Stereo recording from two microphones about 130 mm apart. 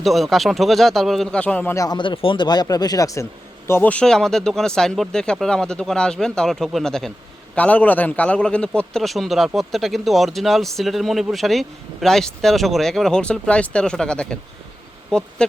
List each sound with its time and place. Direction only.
0.0 s a man's voice: centre (ahead or behind)
1.7 s speech: 25° left (ahead or behind)
2.0 s speech: 40° left (ahead or behind)
3.7 s a man's voice: 15° left (ahead or behind)